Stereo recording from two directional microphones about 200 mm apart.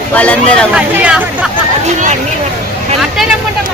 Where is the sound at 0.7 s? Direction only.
5° right (ahead or behind).